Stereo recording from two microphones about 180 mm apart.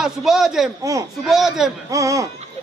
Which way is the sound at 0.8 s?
15° right (ahead or behind).